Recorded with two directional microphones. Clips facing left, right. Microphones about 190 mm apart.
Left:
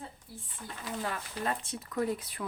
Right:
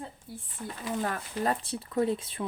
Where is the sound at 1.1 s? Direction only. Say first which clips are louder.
Right 3 dB; 40° right (ahead or behind).